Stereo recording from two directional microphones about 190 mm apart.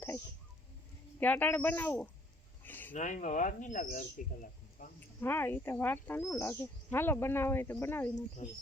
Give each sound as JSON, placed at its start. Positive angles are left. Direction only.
{"t": 1.2, "sound": "speech", "side_deg": 10}
{"t": 2.6, "sound": "a sound", "side_deg": 10}
{"t": 2.9, "sound": "speech", "side_deg": 40}
{"t": 4.8, "sound": "a sound", "side_deg": 45}
{"t": 5.2, "sound": "speech", "side_deg": 10}
{"t": 8.4, "sound": "speech", "side_deg": 40}